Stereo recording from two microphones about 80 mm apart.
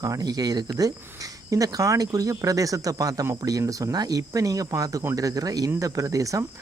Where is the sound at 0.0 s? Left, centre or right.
Right.